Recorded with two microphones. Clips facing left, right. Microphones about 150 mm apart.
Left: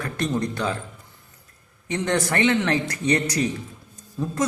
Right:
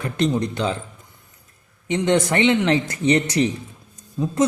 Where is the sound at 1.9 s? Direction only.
20° right (ahead or behind).